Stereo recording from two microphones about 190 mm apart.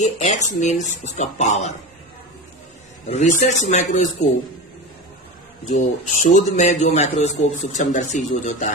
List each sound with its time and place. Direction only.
0.0 s a man's voice: 40° left (ahead or behind)
3.1 s a man's voice: 35° left (ahead or behind)
5.6 s a man's voice: 40° left (ahead or behind)